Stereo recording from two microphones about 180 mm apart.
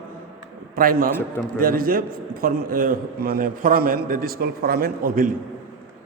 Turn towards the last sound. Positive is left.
turn(degrees=-50)  # may be behind; listen again after turning